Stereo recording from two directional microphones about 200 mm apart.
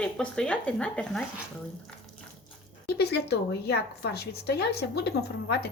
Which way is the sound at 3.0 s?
55° left (ahead or behind).